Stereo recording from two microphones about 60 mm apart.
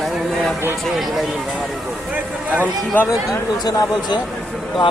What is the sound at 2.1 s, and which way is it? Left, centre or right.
Speech, right.